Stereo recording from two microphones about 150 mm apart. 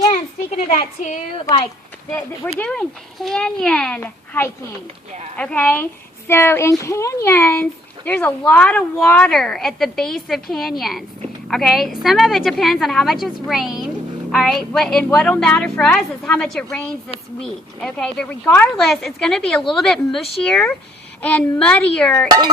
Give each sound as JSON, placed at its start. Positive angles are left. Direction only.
{"t": 0.5, "sound": "a woman's voice", "side_deg": 55}
{"t": 2.1, "sound": "speech", "side_deg": 20}
{"t": 2.6, "sound": "a woman's voice", "side_deg": 5}